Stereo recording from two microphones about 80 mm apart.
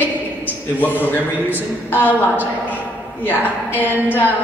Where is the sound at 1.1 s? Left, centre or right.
Left.